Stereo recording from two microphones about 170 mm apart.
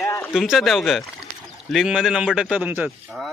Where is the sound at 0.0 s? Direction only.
15° left (ahead or behind).